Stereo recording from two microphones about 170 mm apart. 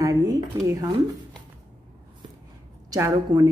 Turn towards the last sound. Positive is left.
turn(degrees=-20)  # may be behind; listen again after turning